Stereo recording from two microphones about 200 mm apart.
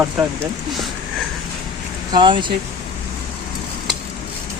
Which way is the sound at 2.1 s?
25° right (ahead or behind).